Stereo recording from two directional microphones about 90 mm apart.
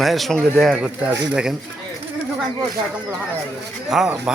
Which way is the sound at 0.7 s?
15° right (ahead or behind).